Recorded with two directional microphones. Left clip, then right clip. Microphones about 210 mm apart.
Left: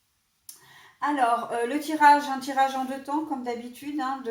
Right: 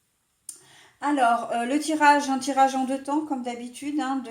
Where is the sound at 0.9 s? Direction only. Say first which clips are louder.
Right 2 dB; 40° right (ahead or behind).